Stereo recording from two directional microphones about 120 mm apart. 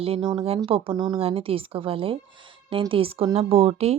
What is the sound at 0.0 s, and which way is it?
Speech, 55° right (ahead or behind).